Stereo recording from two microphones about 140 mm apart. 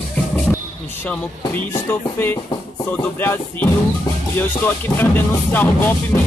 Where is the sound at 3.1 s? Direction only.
15° left (ahead or behind).